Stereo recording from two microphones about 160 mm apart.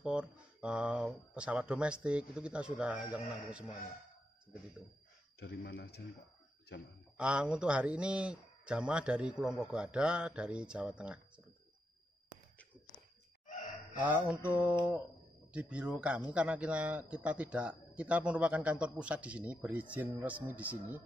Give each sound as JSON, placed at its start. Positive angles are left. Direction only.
{"t": 0.0, "sound": "speech", "side_deg": -5}
{"t": 5.4, "sound": "speech", "side_deg": 90}
{"t": 7.2, "sound": "speech", "side_deg": -5}
{"t": 13.5, "sound": "a sound", "side_deg": 50}
{"t": 14.0, "sound": "speech", "side_deg": -10}